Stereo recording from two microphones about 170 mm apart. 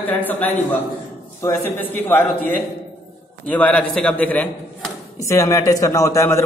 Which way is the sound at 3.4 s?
10° left (ahead or behind).